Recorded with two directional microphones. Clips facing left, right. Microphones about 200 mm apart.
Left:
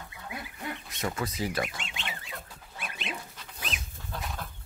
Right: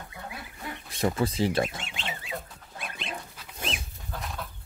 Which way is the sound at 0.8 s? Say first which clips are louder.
Right 8 dB; 30° right (ahead or behind).